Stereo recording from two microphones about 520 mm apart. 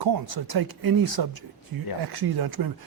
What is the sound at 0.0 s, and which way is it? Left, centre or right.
Speech, right.